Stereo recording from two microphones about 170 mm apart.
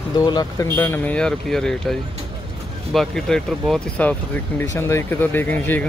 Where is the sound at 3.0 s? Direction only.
5° left (ahead or behind).